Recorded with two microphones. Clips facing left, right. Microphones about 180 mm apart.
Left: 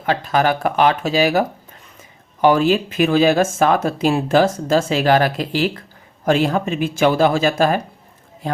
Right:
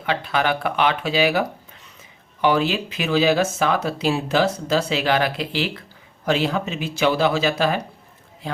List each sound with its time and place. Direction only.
0.0 s speech: 40° left (ahead or behind)